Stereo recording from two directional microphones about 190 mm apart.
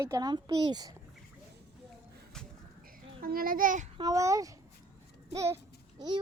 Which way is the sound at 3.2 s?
50° right (ahead or behind).